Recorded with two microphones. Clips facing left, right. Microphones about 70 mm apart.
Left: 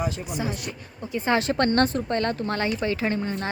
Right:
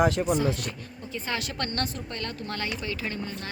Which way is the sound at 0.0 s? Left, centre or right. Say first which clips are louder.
Right 6 dB; right.